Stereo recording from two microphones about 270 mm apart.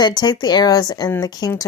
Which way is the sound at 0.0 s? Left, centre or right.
Centre.